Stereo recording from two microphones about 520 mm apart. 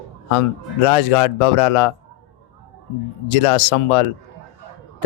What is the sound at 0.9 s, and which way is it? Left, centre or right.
Speech, left.